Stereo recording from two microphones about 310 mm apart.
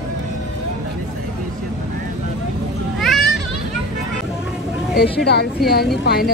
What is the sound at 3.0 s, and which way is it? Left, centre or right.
Children playing, centre.